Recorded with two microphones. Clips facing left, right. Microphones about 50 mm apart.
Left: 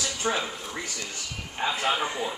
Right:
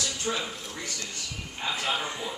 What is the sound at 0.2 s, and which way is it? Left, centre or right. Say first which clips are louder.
Speech: left 4 dB; left.